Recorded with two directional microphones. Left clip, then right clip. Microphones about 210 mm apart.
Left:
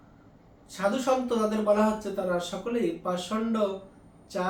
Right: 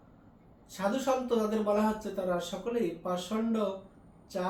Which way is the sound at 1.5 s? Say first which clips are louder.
Left 4 dB; 15° left (ahead or behind).